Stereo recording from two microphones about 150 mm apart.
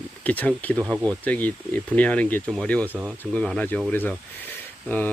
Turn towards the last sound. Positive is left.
turn(degrees=10)  # may be behind; listen again after turning